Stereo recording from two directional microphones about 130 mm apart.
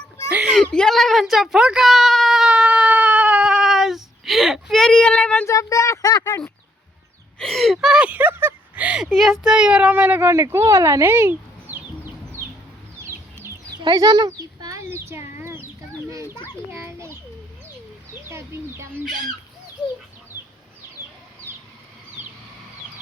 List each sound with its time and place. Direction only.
0.3 s a sound: 10° right (ahead or behind)
0.5 s a sound: 5° left (ahead or behind)
5.5 s speech: 25° left (ahead or behind)
7.3 s speech: 5° left (ahead or behind)
9.0 s speech: centre (ahead or behind); by 11.8 s 15° right (ahead or behind)
13.0 s chicken: 20° right (ahead or behind)
16.7 s children playing: 20° right (ahead or behind)
18.1 s bird: 20° right (ahead or behind)